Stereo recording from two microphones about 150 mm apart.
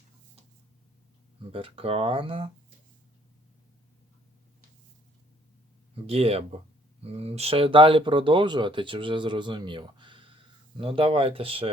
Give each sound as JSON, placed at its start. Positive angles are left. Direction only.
{"t": 1.5, "sound": "speech", "side_deg": -35}
{"t": 6.1, "sound": "speech", "side_deg": -40}